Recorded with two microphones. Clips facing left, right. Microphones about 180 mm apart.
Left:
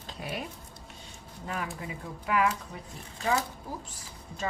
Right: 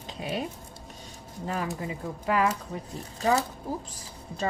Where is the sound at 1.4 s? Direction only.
35° right (ahead or behind).